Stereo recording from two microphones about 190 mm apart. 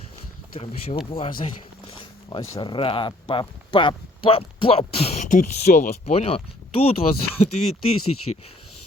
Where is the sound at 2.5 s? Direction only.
25° left (ahead or behind).